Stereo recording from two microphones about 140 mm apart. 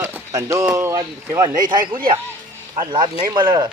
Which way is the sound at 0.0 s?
20° right (ahead or behind).